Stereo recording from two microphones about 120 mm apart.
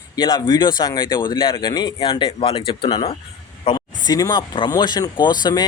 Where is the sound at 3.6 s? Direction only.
45° left (ahead or behind).